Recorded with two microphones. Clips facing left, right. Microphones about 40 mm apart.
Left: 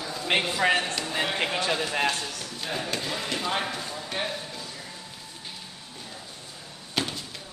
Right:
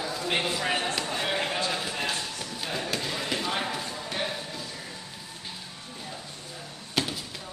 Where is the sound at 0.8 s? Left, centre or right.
Centre.